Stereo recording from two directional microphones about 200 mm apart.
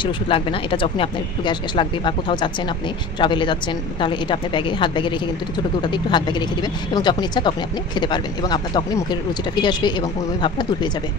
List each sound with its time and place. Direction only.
0.0 s speech: 25° left (ahead or behind)